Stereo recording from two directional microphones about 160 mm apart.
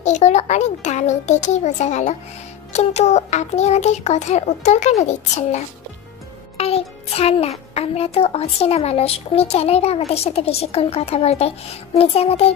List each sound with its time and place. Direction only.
0.0 s a child's voice: 45° left (ahead or behind)